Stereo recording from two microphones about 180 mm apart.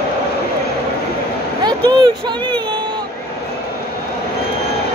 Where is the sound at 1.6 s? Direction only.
25° right (ahead or behind).